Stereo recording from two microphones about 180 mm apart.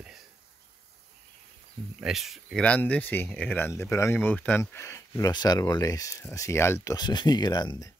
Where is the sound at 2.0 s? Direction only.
Centre (ahead or behind); by 7.8 s 25° left (ahead or behind).